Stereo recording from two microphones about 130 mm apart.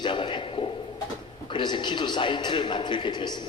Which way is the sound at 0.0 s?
40° left (ahead or behind).